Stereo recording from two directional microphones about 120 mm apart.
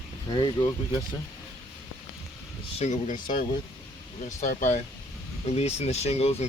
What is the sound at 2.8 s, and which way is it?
Speech, 90° left.